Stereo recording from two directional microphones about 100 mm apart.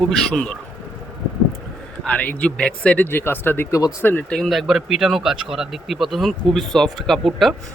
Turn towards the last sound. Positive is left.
turn(degrees=0)  # may be behind; listen again after turning